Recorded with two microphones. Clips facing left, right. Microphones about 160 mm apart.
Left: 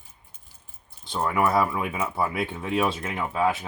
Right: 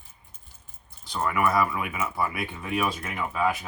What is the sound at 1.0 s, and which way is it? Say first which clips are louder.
Speech: left 1 dB; 25° left (ahead or behind).